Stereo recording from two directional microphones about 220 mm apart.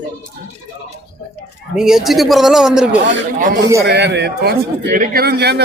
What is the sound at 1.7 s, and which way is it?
A man's voice, centre (ahead or behind).